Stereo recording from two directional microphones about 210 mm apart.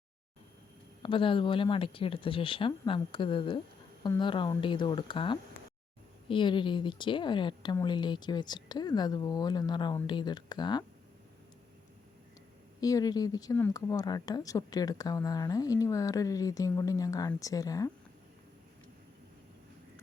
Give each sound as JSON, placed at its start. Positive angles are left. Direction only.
{"t": 1.0, "sound": "a woman's voice", "side_deg": 25}
{"t": 12.8, "sound": "speech", "side_deg": 15}